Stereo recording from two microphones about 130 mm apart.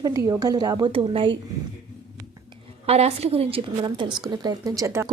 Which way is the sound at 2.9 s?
55° right (ahead or behind).